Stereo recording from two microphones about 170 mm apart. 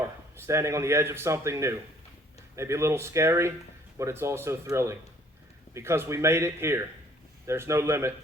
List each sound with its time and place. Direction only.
0.0 s speech: 15° right (ahead or behind)